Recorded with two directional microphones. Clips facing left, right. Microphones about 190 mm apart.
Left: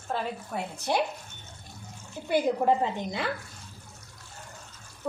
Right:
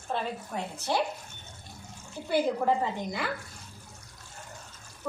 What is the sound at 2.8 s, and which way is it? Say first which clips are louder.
Speech: left 2 dB; 20° left (ahead or behind).